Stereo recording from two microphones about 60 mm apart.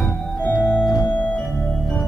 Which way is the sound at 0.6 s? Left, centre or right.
Left.